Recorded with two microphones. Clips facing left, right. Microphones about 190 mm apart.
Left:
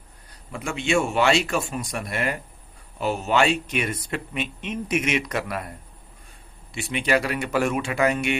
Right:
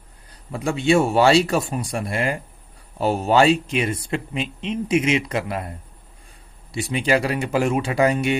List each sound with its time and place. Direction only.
0.5 s speech: 30° right (ahead or behind)